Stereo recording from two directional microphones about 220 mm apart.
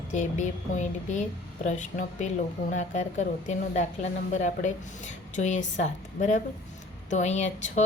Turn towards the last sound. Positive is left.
turn(degrees=30)  # may be behind; listen again after turning